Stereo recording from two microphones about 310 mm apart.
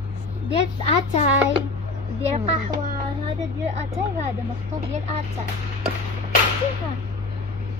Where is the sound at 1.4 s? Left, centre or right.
Centre.